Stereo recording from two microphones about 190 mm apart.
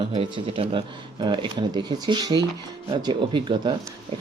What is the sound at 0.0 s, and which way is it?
Speech, 30° right (ahead or behind).